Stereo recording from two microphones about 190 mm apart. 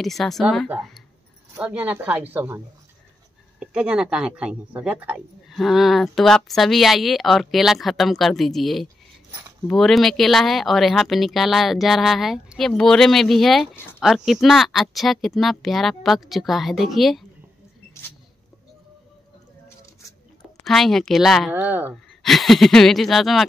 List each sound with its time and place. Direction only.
0.0 s speech: centre (ahead or behind)
20.0 s a sound: 15° left (ahead or behind)
20.6 s speech: centre (ahead or behind)
22.2 s speech: centre (ahead or behind)